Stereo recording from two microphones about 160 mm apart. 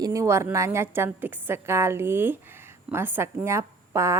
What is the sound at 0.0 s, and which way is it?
Speech, 20° right (ahead or behind).